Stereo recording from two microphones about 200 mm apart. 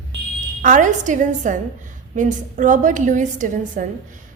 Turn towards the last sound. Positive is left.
turn(degrees=-40)  # may be behind; listen again after turning